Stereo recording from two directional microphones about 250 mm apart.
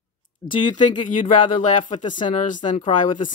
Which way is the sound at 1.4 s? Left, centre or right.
Left.